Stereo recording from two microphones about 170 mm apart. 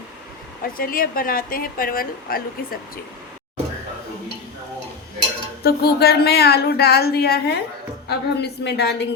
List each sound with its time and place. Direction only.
0.6 s a woman's voice: 60° left (ahead or behind)
5.6 s a woman's voice: 65° left (ahead or behind)